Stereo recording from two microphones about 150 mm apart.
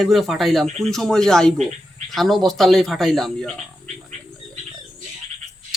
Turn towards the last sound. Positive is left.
turn(degrees=-50)  # may be behind; listen again after turning